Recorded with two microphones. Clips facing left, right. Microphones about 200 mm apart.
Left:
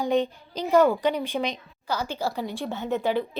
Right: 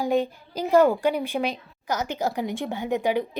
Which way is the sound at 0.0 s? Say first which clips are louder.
Even; 5° right (ahead or behind).